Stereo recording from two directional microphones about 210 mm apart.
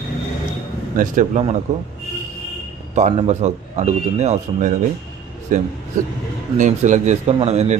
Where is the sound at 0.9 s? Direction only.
40° right (ahead or behind).